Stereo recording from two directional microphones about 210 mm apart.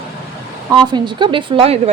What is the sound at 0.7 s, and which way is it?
A woman's voice, 20° right (ahead or behind).